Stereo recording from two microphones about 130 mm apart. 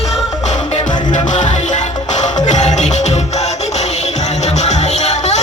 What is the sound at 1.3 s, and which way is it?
Music, 70° left (ahead or behind).